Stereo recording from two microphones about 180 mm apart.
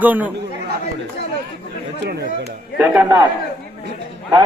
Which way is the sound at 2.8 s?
10° right (ahead or behind).